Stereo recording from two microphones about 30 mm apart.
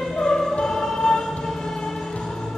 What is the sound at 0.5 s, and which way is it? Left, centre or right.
Choir, centre.